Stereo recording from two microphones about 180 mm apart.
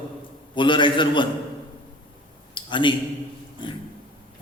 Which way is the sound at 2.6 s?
25° left (ahead or behind).